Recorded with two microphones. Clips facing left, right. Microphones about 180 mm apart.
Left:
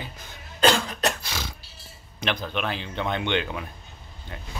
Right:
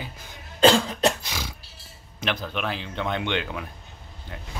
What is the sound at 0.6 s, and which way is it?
Cough, 30° right (ahead or behind).